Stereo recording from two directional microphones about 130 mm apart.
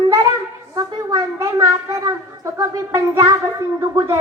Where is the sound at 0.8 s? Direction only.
25° right (ahead or behind).